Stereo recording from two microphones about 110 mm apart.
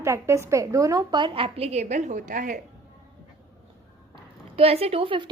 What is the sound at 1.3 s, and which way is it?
A woman's voice, 60° right (ahead or behind).